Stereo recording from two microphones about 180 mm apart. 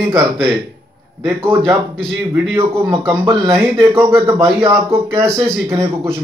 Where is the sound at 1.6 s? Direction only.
5° left (ahead or behind).